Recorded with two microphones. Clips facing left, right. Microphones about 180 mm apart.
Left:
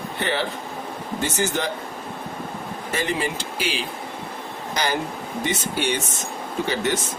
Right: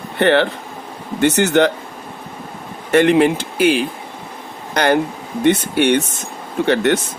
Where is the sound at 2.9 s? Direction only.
65° right (ahead or behind).